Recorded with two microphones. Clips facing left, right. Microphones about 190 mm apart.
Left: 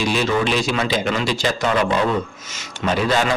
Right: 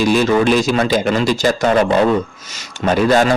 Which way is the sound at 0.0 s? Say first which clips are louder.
Right 6 dB; 45° right (ahead or behind).